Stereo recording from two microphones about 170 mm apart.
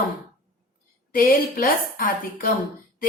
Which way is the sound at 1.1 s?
55° left (ahead or behind).